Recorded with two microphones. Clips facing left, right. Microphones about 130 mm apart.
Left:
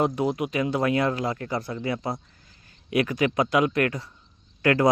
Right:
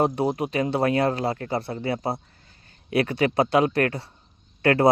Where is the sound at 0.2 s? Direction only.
35° right (ahead or behind).